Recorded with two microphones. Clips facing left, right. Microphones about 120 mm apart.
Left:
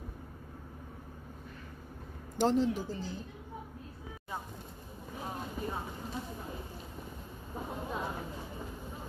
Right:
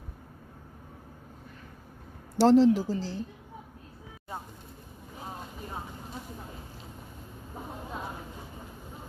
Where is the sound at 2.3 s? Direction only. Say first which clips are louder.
Right 9 dB; 90° right.